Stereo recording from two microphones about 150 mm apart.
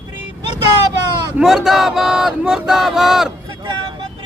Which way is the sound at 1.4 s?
5° right (ahead or behind).